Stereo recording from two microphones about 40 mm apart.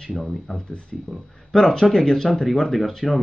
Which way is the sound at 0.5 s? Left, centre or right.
Left.